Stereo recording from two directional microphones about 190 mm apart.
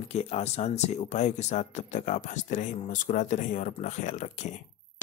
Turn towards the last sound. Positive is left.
turn(degrees=40)  # may be behind; listen again after turning